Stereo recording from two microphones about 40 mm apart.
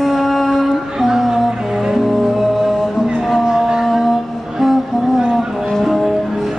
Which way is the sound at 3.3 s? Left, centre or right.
Centre.